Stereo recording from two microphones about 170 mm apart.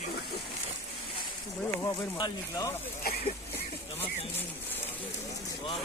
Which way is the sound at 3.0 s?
60° left (ahead or behind).